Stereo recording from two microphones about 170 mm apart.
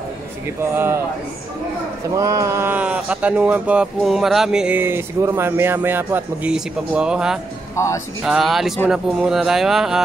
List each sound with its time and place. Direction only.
0.6 s speech: 15° right (ahead or behind)
2.0 s speech: 20° right (ahead or behind)
7.7 s speech: 15° left (ahead or behind)
8.2 s speech: centre (ahead or behind)